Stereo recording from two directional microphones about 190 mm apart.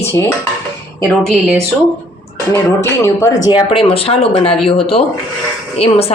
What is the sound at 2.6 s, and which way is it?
Speech, 15° left (ahead or behind).